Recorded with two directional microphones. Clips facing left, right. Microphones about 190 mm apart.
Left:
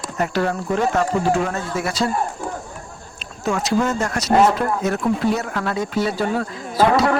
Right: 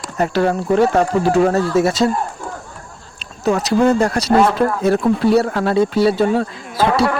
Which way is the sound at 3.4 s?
35° right (ahead or behind).